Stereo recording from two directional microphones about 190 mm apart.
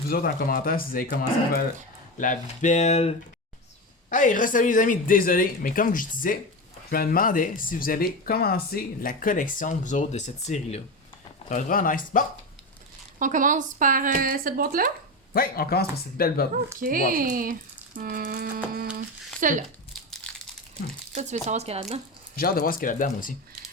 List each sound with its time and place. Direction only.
0.1 s speech: 50° left (ahead or behind)
2.1 s speech: 40° left (ahead or behind)
13.1 s speech: 45° right (ahead or behind)
15.3 s speech: 50° left (ahead or behind)
16.8 s speech: 45° right (ahead or behind)
21.2 s speech: 35° right (ahead or behind)
22.4 s speech: 50° left (ahead or behind)